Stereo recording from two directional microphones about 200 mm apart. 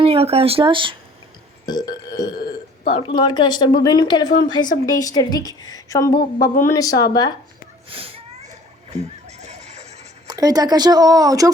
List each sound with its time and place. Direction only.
0.0 s speech: 30° right (ahead or behind)
1.6 s burping: 20° left (ahead or behind)
2.9 s a woman's voice: 25° left (ahead or behind)
7.9 s a sound: 30° right (ahead or behind)
9.2 s neigh: 35° right (ahead or behind)
10.2 s speech: 20° right (ahead or behind)